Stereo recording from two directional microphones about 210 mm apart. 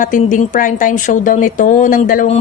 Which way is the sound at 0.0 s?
40° left (ahead or behind).